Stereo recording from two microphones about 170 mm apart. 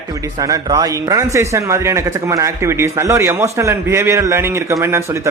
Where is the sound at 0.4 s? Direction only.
20° right (ahead or behind).